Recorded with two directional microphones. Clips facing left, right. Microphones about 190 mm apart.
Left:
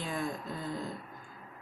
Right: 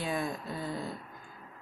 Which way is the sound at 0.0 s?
10° right (ahead or behind).